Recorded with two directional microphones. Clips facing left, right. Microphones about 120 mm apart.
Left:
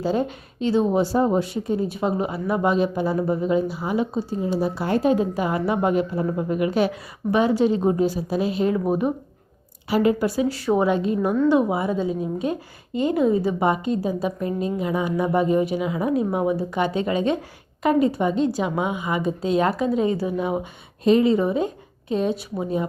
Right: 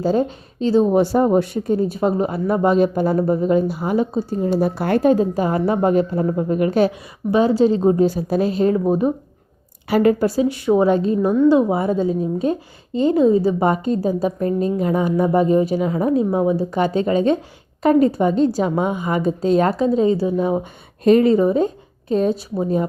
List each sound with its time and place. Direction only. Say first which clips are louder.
0.0 s a woman's voice: right 4 dB; 40° right (ahead or behind)
0.9 s speech: right 4 dB; 60° right (ahead or behind)
1.4 s speech: right 5 dB; 45° right (ahead or behind)
5.1 s a woman's voice: right 4 dB; 40° right (ahead or behind)
7.3 s a woman's voice: right 4 dB; 30° right (ahead or behind)
9.9 s a woman's voice: right 4 dB; 45° right (ahead or behind)
10.5 s a woman's voice: right 4 dB; 20° right (ahead or behind)
10.8 s a woman's voice: right 4 dB; 40° right (ahead or behind)
21.0 s speech: right 4 dB; 50° right (ahead or behind)
22.1 s a woman's voice: right 5 dB; 40° right (ahead or behind)